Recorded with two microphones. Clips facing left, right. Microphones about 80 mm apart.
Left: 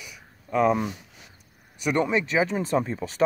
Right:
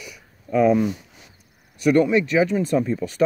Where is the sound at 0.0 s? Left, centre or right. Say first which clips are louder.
Right 4 dB; centre.